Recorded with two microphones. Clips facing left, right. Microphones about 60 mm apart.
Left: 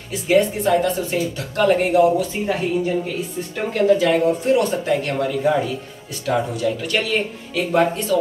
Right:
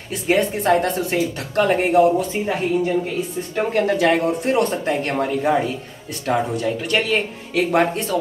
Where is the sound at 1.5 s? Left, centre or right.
Right.